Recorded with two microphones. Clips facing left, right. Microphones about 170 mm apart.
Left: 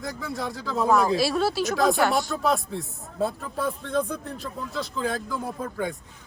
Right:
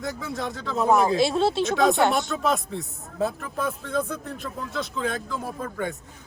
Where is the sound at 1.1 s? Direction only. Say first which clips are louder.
Right 2 dB; 20° right (ahead or behind).